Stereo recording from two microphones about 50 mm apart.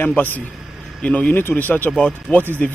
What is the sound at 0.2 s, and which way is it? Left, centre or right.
Speech, left.